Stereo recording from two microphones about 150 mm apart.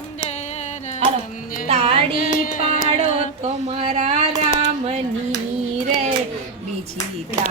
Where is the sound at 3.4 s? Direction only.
45° right (ahead or behind).